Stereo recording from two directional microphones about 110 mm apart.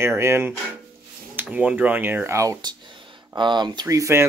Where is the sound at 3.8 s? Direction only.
30° right (ahead or behind).